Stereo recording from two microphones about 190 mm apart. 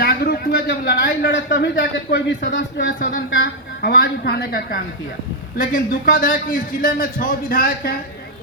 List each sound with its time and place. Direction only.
0.0 s a man's voice: 55° left (ahead or behind)
2.7 s a man's voice: 50° left (ahead or behind)